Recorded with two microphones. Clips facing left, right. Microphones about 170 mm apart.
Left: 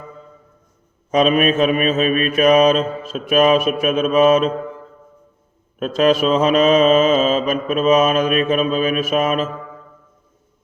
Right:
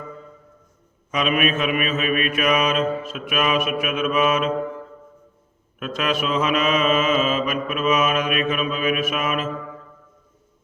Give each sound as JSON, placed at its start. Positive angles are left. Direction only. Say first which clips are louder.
{"t": 1.1, "sound": "mantra", "louder": "left 7 dB", "side_deg": 35}
{"t": 5.8, "sound": "mantra", "louder": "left 9 dB", "side_deg": 35}